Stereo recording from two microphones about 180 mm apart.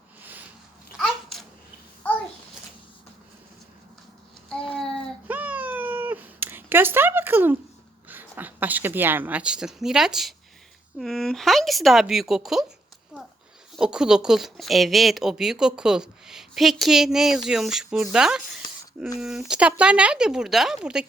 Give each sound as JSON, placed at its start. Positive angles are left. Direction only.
{"t": 0.9, "sound": "babbling", "side_deg": 0}
{"t": 4.4, "sound": "child singing", "side_deg": 5}
{"t": 5.3, "sound": "cat", "side_deg": -10}
{"t": 8.0, "sound": "a woman's voice", "side_deg": -10}
{"t": 13.1, "sound": "a sound", "side_deg": -5}
{"t": 13.7, "sound": "speech", "side_deg": -5}